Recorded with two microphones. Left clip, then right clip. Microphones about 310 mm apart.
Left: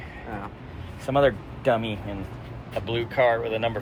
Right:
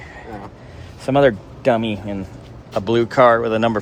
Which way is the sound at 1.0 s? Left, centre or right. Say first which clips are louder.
Right 6 dB; right.